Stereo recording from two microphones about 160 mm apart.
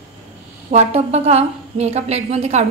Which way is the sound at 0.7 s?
40° right (ahead or behind).